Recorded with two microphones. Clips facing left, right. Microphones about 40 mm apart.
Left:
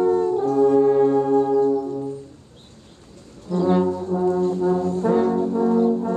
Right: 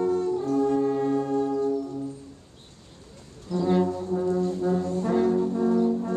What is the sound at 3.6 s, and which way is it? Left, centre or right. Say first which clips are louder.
Brass instrument: left 4 dB; centre.